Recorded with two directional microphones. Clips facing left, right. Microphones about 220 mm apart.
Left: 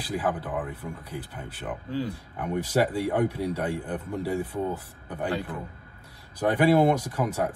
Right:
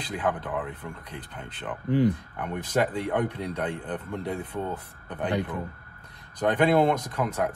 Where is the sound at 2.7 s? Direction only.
10° left (ahead or behind).